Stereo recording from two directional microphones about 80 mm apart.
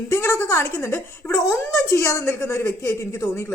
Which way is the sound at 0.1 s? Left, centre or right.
Left.